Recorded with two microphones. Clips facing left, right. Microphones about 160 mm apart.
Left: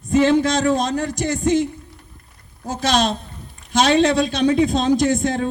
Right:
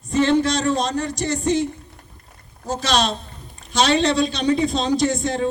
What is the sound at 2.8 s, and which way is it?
A woman's voice, 50° left (ahead or behind).